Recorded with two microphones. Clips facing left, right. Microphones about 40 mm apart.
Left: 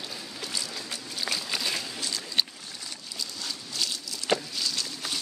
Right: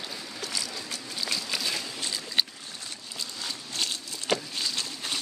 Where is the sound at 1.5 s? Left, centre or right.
Centre.